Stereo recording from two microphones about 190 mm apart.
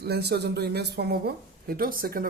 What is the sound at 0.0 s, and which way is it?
Speech, 60° right (ahead or behind).